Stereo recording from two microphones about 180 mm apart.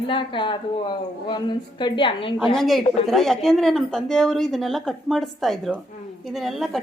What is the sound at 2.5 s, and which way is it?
A woman's voice, centre (ahead or behind).